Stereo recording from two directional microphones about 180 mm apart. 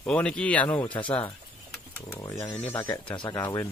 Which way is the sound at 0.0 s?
5° left (ahead or behind).